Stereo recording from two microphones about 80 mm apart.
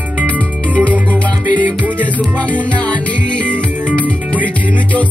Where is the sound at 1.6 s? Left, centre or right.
Right.